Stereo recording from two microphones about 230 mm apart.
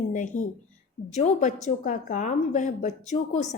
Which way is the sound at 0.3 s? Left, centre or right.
Left.